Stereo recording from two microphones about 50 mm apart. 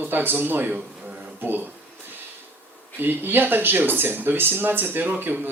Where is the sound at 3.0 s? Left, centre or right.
Right.